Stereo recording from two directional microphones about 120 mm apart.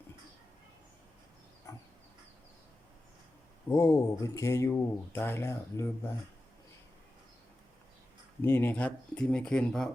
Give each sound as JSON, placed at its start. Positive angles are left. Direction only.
{"t": 1.7, "sound": "pig", "side_deg": 30}
{"t": 3.7, "sound": "speech", "side_deg": 25}
{"t": 8.4, "sound": "speech", "side_deg": 20}